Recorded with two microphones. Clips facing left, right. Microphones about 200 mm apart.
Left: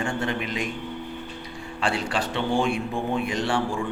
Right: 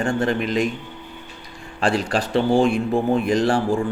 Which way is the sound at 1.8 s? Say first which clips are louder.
Right 5 dB; 40° right (ahead or behind).